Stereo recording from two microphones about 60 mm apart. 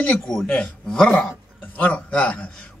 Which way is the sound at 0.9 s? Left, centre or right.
Centre.